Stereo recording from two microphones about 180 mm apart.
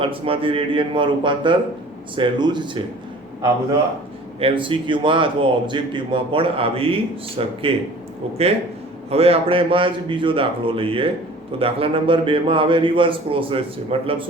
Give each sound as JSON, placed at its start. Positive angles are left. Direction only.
{"t": 0.0, "sound": "a man's voice", "side_deg": -30}
{"t": 4.4, "sound": "a man's voice", "side_deg": -30}
{"t": 9.0, "sound": "a man's voice", "side_deg": -35}